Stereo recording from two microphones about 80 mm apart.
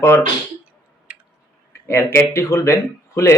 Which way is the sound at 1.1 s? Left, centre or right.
Centre.